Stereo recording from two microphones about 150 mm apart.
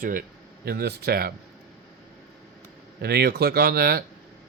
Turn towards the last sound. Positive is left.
turn(degrees=-90)